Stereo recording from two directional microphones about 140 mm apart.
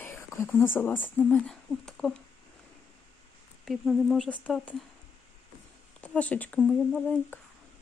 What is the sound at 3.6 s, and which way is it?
Speech, centre (ahead or behind).